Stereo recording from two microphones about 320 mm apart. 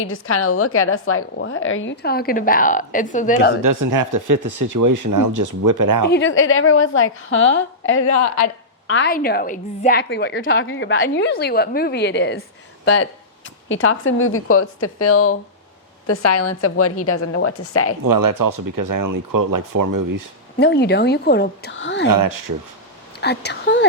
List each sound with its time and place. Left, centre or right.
0.0 s a woman's voice: left
3.6 s speech: right
6.1 s a woman's voice: left
8.9 s a woman's voice: left
18.0 s speech: right
20.6 s a woman's voice: left
22.1 s speech: right
23.2 s a woman's voice: left